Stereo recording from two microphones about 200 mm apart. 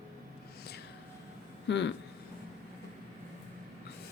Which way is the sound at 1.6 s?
60° left (ahead or behind).